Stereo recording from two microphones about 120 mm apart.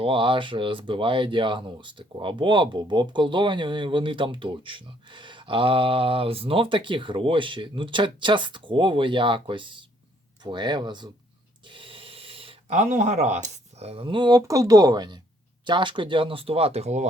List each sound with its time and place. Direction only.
0.0 s speech: 45° right (ahead or behind)
11.7 s a sound: 45° right (ahead or behind)
12.7 s speech: 80° right